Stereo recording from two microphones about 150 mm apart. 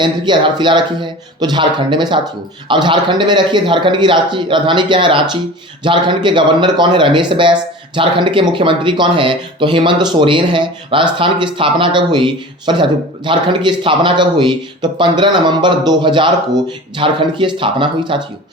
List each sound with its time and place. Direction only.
0.0 s speech: 30° right (ahead or behind)